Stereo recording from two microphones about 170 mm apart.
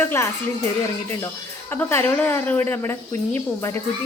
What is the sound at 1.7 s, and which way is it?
A woman's voice, 15° left (ahead or behind).